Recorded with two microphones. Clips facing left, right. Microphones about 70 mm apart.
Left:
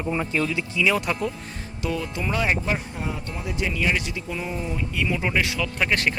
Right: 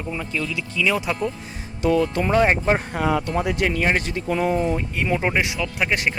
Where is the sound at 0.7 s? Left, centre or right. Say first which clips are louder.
Right 2 dB; centre.